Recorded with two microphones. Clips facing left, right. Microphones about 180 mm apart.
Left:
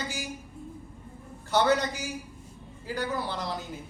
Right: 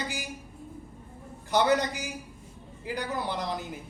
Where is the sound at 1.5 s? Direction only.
15° right (ahead or behind).